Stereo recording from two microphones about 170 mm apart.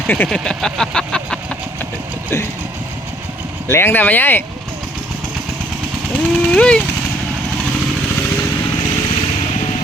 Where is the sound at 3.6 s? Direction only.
15° left (ahead or behind).